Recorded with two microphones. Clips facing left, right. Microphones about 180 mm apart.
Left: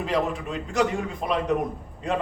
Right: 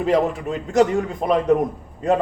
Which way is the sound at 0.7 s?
45° right (ahead or behind).